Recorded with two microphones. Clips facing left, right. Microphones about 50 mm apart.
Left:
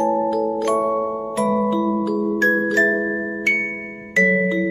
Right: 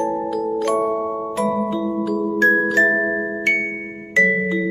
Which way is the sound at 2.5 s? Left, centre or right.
Centre.